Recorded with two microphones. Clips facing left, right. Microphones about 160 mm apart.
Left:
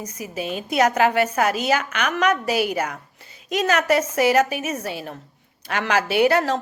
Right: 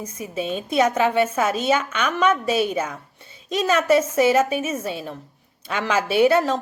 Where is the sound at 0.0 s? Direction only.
25° right (ahead or behind).